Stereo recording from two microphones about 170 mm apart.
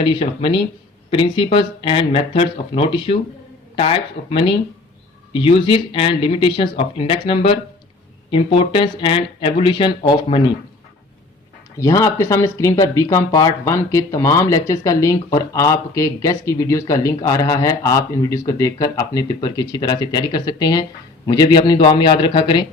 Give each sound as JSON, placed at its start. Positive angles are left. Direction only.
{"t": 0.0, "sound": "speech", "side_deg": 30}
{"t": 11.8, "sound": "speech", "side_deg": 20}